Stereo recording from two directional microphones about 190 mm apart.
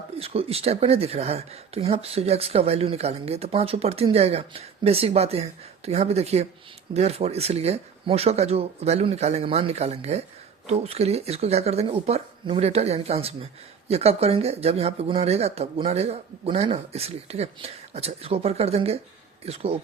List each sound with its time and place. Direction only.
0.2 s speech: 30° right (ahead or behind)